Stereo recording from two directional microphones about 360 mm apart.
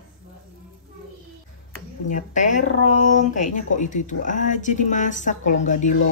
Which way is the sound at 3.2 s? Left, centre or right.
Left.